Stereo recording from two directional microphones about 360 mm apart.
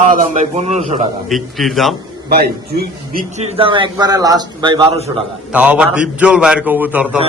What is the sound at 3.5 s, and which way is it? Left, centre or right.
A man's voice, centre.